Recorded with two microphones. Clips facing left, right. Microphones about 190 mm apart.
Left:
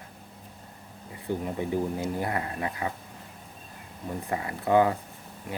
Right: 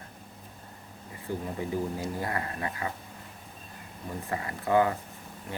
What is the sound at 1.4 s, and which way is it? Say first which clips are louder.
Speech: left 3 dB; 20° left (ahead or behind).